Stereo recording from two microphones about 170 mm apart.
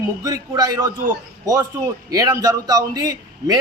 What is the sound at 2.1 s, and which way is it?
Speech, 20° right (ahead or behind).